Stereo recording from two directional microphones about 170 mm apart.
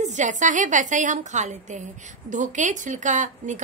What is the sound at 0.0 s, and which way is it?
A woman's voice, 45° right (ahead or behind).